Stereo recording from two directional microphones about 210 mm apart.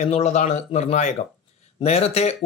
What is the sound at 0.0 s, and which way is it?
Speech, 30° left (ahead or behind).